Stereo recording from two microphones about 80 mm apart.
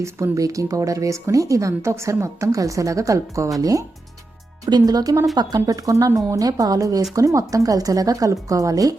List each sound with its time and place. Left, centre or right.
0.0 s speech: right